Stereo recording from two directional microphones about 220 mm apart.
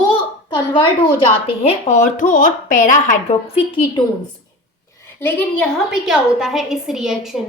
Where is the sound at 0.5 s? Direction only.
20° left (ahead or behind).